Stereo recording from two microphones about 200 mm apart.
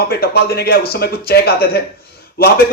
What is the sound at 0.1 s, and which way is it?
Speech, 50° left (ahead or behind).